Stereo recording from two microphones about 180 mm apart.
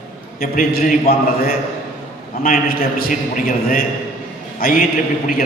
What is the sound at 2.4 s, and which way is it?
A man's voice, 55° left (ahead or behind).